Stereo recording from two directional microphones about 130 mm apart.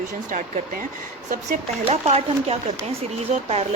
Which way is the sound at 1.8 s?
55° right (ahead or behind).